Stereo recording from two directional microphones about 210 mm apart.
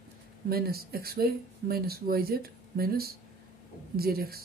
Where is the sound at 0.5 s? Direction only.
45° right (ahead or behind).